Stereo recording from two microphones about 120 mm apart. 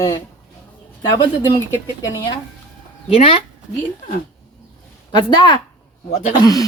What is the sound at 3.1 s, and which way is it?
Speech, 55° left (ahead or behind).